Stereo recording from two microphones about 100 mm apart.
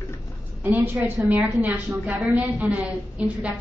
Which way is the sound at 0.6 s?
20° right (ahead or behind).